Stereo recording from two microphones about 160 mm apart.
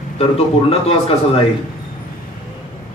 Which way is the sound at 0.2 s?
35° left (ahead or behind).